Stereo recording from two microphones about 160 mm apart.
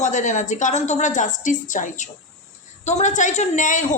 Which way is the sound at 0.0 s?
50° left (ahead or behind).